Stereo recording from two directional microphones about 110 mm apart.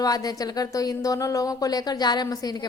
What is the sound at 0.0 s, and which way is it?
Speech, 35° left (ahead or behind).